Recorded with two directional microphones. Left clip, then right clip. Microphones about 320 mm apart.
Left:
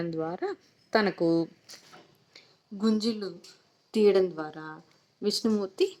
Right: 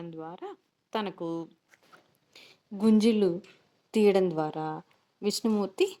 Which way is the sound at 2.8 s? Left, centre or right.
Centre.